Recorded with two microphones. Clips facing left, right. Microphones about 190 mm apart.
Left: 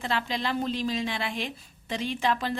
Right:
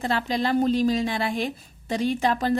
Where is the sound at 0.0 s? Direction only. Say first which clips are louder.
Right 5 dB; 40° right (ahead or behind).